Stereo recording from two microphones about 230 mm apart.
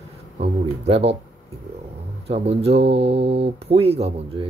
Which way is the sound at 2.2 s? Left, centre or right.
Right.